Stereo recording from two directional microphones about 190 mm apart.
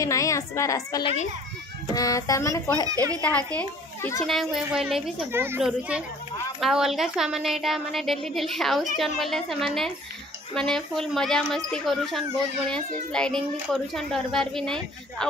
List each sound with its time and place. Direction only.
0.0 s a woman's voice: 15° left (ahead or behind)
1.0 s a child's voice: 35° left (ahead or behind)
2.0 s a woman's voice: 20° left (ahead or behind)
2.9 s a child's voice: 20° right (ahead or behind)
3.2 s a child's voice: 5° left (ahead or behind)
5.3 s a child's voice: 10° right (ahead or behind); by 15.2 s 5° left (ahead or behind)